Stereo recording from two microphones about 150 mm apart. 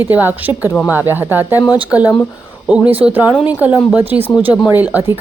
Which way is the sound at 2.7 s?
10° right (ahead or behind).